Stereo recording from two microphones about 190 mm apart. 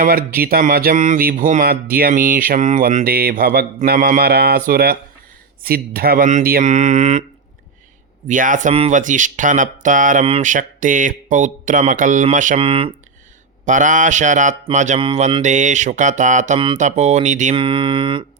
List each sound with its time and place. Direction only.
0.0 s speech: 50° right (ahead or behind)
8.3 s speech: 45° right (ahead or behind)
13.7 s speech: 40° right (ahead or behind)
17.5 s mantra: 25° right (ahead or behind)